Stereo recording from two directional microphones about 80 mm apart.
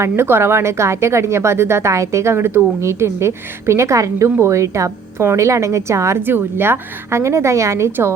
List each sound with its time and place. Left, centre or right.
0.0 s a woman's voice: right